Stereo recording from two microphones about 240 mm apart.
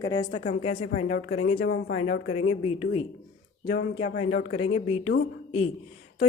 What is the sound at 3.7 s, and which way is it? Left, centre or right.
Speech, left.